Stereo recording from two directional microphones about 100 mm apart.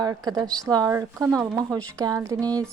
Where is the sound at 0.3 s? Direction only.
45° right (ahead or behind).